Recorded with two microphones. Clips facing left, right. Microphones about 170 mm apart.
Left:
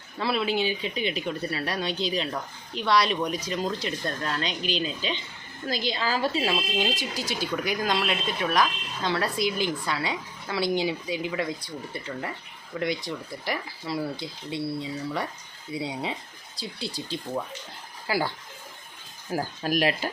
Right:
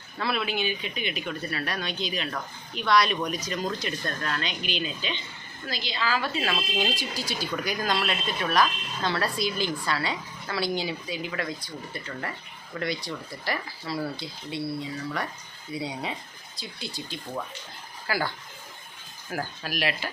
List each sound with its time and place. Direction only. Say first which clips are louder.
0.2 s speech: left 3 dB; 25° left (ahead or behind)
4.4 s speech: left 3 dB; 35° left (ahead or behind)
5.6 s a woman's voice: left 3 dB; 45° left (ahead or behind)
6.4 s speech: left 2 dB; 20° left (ahead or behind)
15.7 s speech: left 1 dB; 25° left (ahead or behind)
19.3 s speech: left 6 dB; 30° left (ahead or behind)